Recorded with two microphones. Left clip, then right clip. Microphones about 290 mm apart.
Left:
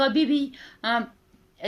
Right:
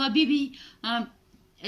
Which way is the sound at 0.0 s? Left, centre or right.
Centre.